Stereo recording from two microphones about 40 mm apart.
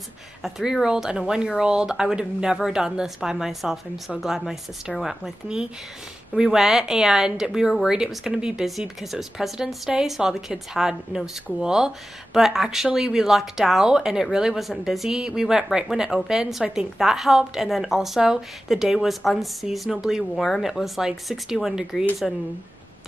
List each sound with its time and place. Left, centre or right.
0.4 s a woman's voice: centre
8.1 s a woman's voice: centre
8.4 s speech: right
9.0 s a woman's voice: centre
14.6 s speech: centre
15.0 s a woman's voice: centre
19.9 s a woman's voice: centre
20.6 s a woman's voice: centre